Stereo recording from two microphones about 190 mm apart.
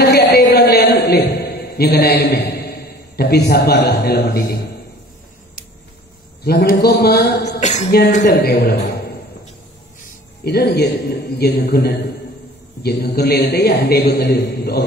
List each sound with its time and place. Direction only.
0.0 s a sound: 60° left (ahead or behind)
6.4 s a man's voice: 50° left (ahead or behind)
7.6 s speech: 35° left (ahead or behind)
8.2 s a man's voice: 60° left (ahead or behind)
10.4 s a man's voice: 55° left (ahead or behind)